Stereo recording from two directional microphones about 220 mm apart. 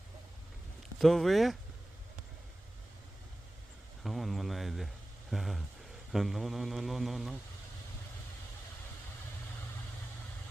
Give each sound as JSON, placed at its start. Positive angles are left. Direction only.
{"t": 0.9, "sound": "speech", "side_deg": 0}
{"t": 4.0, "sound": "speech", "side_deg": 0}